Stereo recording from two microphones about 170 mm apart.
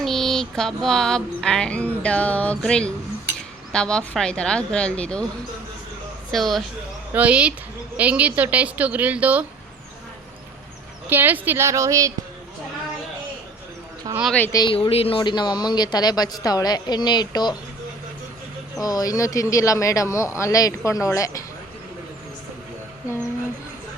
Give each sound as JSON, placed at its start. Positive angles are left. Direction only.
{"t": 0.0, "sound": "music", "side_deg": 0}
{"t": 6.3, "sound": "music", "side_deg": 0}
{"t": 7.1, "sound": "a woman's voice", "side_deg": -10}
{"t": 11.1, "sound": "a woman's voice", "side_deg": -10}
{"t": 14.3, "sound": "speech", "side_deg": 15}
{"t": 14.6, "sound": "speech", "side_deg": 30}
{"t": 18.8, "sound": "speech", "side_deg": 20}